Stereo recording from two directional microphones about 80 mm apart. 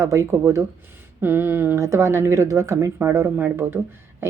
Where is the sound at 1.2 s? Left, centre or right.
Right.